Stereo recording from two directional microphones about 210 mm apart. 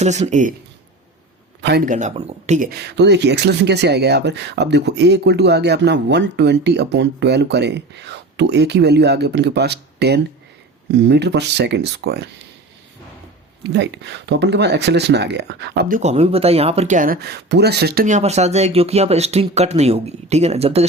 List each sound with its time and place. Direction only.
0.0 s speech: 35° right (ahead or behind)
1.6 s speech: 45° right (ahead or behind)
13.7 s speech: 55° right (ahead or behind)
16.0 s speech: 30° right (ahead or behind)